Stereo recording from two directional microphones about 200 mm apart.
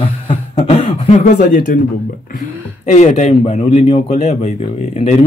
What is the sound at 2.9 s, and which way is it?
Speech, 35° left (ahead or behind).